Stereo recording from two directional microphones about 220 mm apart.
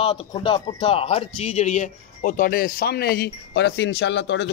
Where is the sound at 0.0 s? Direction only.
20° left (ahead or behind).